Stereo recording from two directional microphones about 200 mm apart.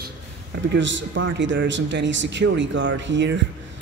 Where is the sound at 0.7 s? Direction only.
70° right (ahead or behind).